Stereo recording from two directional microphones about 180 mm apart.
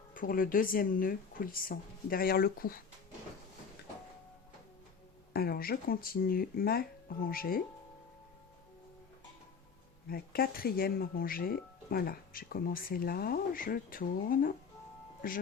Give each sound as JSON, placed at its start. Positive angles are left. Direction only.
{"t": 0.1, "sound": "speech", "side_deg": 50}
{"t": 5.3, "sound": "speech", "side_deg": 55}
{"t": 10.1, "sound": "speech", "side_deg": 55}